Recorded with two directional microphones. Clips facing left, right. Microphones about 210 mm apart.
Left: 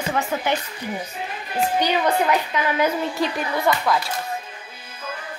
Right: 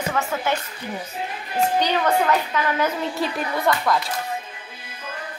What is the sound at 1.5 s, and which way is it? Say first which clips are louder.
A woman's voice: even; 10° left (ahead or behind).